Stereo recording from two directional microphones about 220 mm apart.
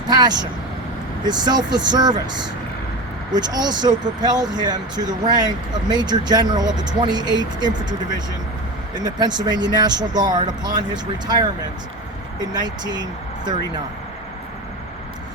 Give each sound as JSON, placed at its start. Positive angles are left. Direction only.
{"t": 0.1, "sound": "speech", "side_deg": -20}
{"t": 3.3, "sound": "speech", "side_deg": -20}
{"t": 9.0, "sound": "speech", "side_deg": -20}